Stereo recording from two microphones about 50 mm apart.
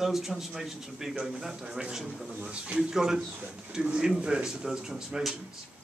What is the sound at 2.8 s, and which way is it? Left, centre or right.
Speech, centre.